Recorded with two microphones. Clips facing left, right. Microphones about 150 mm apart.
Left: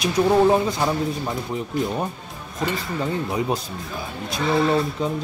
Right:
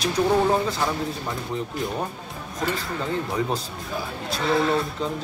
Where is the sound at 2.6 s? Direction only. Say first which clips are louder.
Left 2 dB; 10° left (ahead or behind).